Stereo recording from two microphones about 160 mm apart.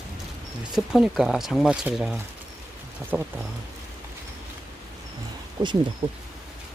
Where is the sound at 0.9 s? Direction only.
5° right (ahead or behind).